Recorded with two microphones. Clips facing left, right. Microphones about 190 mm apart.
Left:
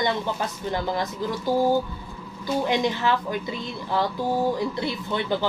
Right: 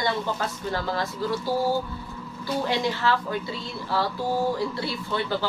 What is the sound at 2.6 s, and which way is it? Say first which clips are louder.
A woman's voice: left 1 dB; 20° left (ahead or behind).